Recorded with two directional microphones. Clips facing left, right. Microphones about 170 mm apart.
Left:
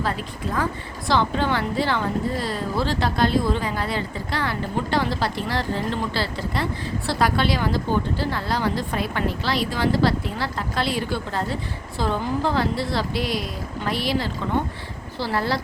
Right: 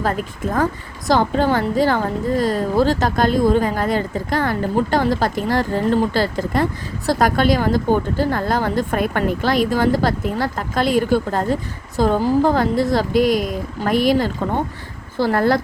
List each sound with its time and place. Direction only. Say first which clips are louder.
0.0 s a woman's voice: right 5 dB; 45° right (ahead or behind)